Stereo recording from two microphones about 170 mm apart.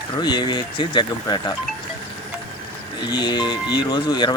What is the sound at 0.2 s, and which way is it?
Speech, 25° left (ahead or behind).